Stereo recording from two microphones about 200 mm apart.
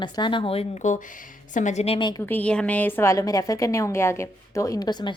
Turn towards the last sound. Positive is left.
turn(degrees=20)  # may be behind; listen again after turning